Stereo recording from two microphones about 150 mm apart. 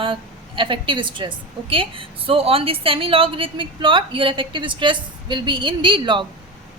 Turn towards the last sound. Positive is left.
turn(degrees=-30)  # may be behind; listen again after turning